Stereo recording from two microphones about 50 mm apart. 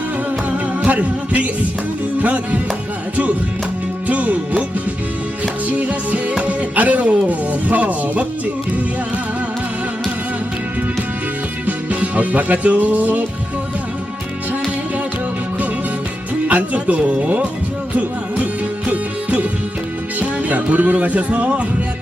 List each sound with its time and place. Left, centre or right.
0.9 s music: right
4.0 s speech: right
5.6 s speech: right
11.6 s music: right
16.5 s speech: right
18.9 s music: right